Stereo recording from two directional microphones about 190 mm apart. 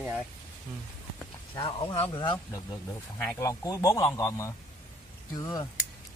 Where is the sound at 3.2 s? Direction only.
10° left (ahead or behind).